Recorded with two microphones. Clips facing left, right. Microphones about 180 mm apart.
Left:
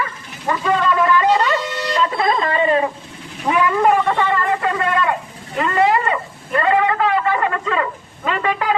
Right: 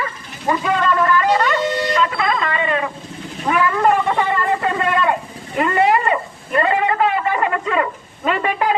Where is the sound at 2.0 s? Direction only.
35° left (ahead or behind).